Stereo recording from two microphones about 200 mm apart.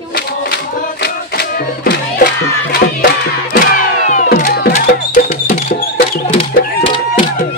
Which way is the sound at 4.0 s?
40° left (ahead or behind).